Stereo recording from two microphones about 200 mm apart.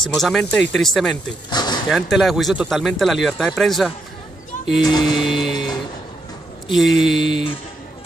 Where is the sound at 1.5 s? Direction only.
20° left (ahead or behind).